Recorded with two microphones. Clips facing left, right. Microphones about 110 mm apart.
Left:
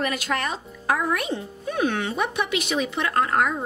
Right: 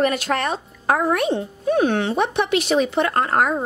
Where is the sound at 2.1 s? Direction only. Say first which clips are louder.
Right 5 dB; 30° right (ahead or behind).